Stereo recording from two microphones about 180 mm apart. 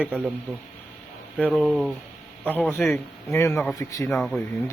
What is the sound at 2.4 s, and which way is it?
Speech, 10° left (ahead or behind).